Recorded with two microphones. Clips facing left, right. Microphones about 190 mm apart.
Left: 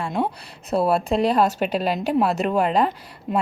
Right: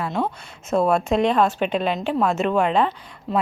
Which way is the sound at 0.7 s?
35° left (ahead or behind).